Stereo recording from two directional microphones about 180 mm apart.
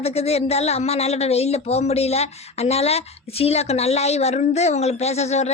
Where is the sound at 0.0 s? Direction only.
35° left (ahead or behind).